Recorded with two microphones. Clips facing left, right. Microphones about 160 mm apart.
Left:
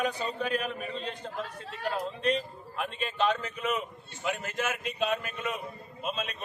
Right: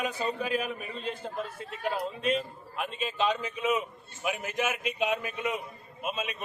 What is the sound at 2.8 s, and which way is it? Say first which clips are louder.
A man's voice: even; 5° right (ahead or behind).